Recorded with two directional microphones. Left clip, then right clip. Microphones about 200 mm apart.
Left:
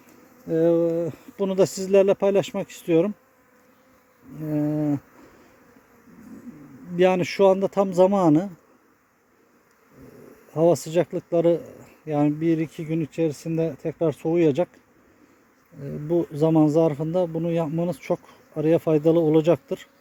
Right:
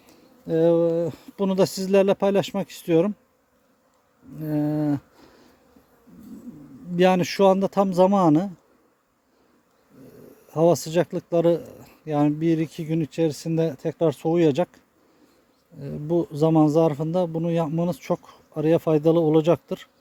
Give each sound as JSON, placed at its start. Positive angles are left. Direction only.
{"t": 0.4, "sound": "speech", "side_deg": -15}
{"t": 4.4, "sound": "speech", "side_deg": -10}
{"t": 6.9, "sound": "speech", "side_deg": -15}
{"t": 10.5, "sound": "speech", "side_deg": -15}
{"t": 15.8, "sound": "speech", "side_deg": -10}